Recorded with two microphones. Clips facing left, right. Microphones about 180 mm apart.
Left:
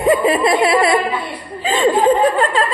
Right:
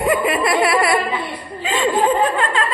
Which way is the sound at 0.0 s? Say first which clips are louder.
Left 4 dB; 25° left (ahead or behind).